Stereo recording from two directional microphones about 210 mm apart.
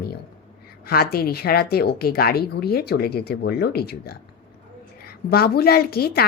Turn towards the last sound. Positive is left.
turn(degrees=45)  # may be behind; listen again after turning